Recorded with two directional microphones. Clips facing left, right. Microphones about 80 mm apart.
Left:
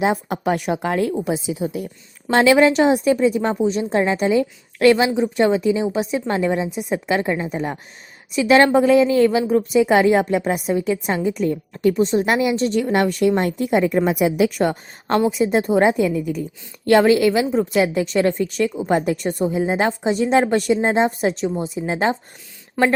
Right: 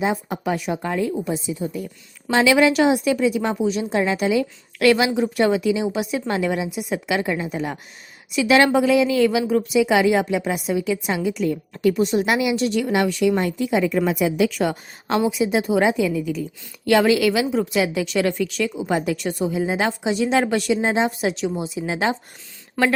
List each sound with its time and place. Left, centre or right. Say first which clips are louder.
0.0 s a woman's voice: left 3 dB; left
1.2 s a woman's voice: left 3 dB; left
2.3 s a woman's voice: left 2 dB; left
15.2 s a woman's voice: left 2 dB; centre
15.4 s a woman's voice: left 3 dB; left
15.9 s a woman's voice: left 2 dB; centre
16.8 s a woman's voice: left 3 dB; left
19.8 s a woman's voice: left 3 dB; centre
20.1 s a woman's voice: left 3 dB; left
21.4 s a woman's voice: left 2 dB; centre
21.8 s a woman's voice: left 2 dB; left